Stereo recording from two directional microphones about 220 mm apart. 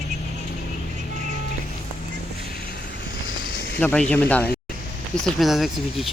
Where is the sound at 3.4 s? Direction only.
40° left (ahead or behind).